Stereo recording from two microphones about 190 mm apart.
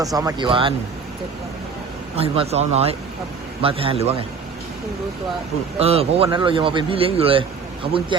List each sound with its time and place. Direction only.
0.0 s a man's voice: 20° right (ahead or behind)
2.1 s a man's voice: 30° right (ahead or behind)
5.8 s a man's voice: 30° right (ahead or behind)